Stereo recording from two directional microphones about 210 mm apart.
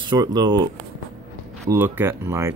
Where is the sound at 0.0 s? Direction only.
20° right (ahead or behind).